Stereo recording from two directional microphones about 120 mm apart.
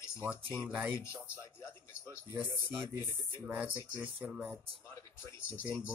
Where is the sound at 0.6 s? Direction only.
15° right (ahead or behind).